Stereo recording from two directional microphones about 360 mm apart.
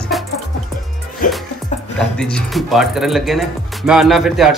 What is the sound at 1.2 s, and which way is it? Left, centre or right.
Speech, left.